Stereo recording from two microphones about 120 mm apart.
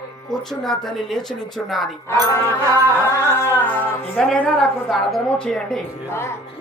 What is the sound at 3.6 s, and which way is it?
A woman's voice, 15° left (ahead or behind).